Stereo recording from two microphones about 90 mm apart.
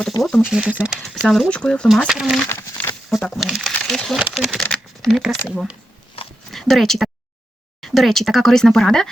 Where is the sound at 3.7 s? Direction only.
5° left (ahead or behind).